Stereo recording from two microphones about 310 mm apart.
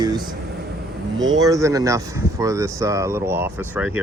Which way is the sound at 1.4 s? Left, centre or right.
Centre.